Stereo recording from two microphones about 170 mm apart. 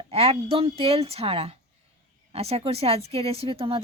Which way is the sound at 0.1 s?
35° right (ahead or behind).